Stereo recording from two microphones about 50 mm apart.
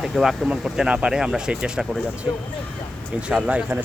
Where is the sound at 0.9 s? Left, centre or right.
Centre.